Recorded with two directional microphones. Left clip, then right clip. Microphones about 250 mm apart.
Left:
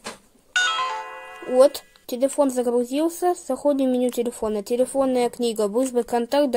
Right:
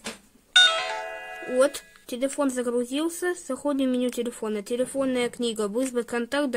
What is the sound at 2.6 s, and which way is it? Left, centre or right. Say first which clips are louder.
Speech: left 5 dB; centre.